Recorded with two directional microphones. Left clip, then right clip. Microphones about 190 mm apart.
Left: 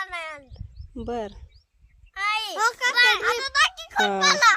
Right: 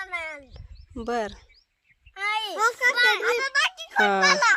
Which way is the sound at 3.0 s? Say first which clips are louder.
Left 4 dB; 25° left (ahead or behind).